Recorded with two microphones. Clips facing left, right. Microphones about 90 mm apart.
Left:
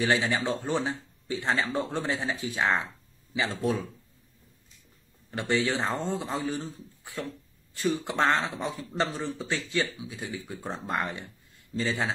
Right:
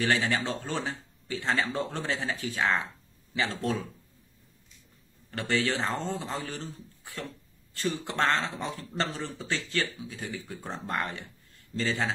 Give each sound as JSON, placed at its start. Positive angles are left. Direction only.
{"t": 0.0, "sound": "speech", "side_deg": 20}
{"t": 5.3, "sound": "speech", "side_deg": 20}